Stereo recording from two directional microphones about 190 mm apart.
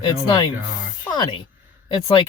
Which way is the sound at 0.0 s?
20° left (ahead or behind).